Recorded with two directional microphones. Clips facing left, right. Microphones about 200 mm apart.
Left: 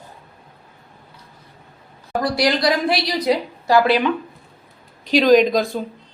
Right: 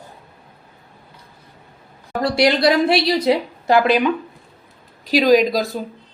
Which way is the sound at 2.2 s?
25° right (ahead or behind).